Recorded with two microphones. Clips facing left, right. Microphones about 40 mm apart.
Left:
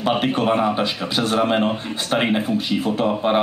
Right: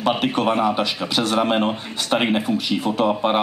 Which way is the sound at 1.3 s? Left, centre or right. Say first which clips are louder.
Left 2 dB; centre.